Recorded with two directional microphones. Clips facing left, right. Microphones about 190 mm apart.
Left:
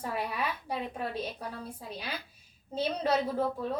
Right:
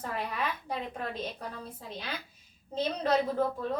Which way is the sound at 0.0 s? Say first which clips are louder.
Left 1 dB; 10° left (ahead or behind).